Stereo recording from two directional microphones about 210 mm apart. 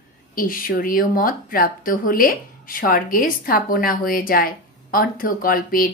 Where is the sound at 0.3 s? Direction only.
40° left (ahead or behind).